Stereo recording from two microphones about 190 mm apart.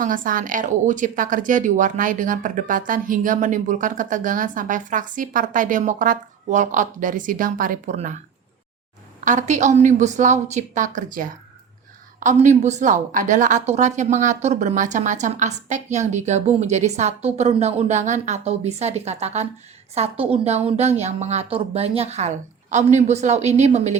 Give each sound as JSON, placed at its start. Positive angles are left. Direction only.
{"t": 0.0, "sound": "speech", "side_deg": -45}
{"t": 9.2, "sound": "a woman's voice", "side_deg": -40}